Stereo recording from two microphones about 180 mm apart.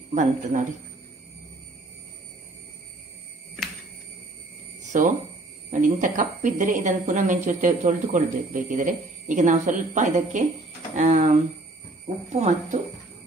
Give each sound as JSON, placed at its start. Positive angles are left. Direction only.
{"t": 0.1, "sound": "speech", "side_deg": -45}
{"t": 4.9, "sound": "speech", "side_deg": -45}